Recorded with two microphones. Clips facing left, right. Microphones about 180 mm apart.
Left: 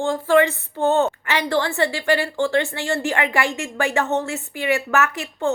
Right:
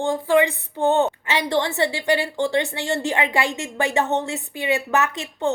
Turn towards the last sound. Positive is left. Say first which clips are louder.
# left 1 dB
turn(degrees=-20)  # may be behind; listen again after turning